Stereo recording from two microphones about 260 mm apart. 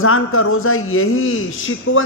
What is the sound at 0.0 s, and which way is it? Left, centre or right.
A man's voice, left.